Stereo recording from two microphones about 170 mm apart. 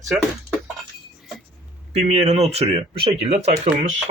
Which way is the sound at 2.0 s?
40° right (ahead or behind).